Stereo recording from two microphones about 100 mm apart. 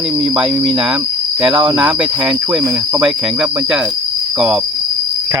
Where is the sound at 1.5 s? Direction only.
60° right (ahead or behind).